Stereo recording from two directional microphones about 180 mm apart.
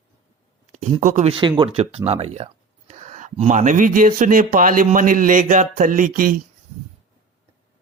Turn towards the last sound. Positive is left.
turn(degrees=-50)  # may be behind; listen again after turning